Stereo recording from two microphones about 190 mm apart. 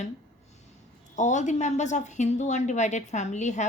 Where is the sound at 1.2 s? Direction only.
40° left (ahead or behind).